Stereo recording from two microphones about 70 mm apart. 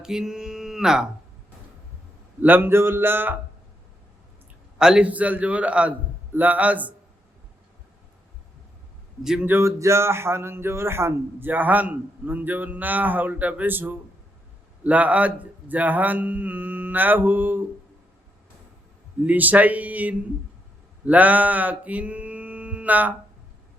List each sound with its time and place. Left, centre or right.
0.0 s speech: centre
2.4 s speech: right
4.8 s a man's voice: centre
5.1 s a man's voice: right
9.2 s a man's voice: centre
9.5 s a man's voice: right
19.2 s a man's voice: right
21.0 s a sound: right